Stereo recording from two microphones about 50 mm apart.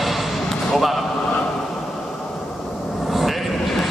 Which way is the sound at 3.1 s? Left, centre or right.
Centre.